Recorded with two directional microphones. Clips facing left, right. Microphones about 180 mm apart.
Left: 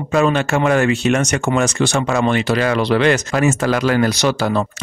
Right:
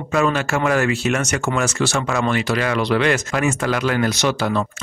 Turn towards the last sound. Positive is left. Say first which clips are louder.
# left 3 dB
turn(degrees=35)  # may be behind; listen again after turning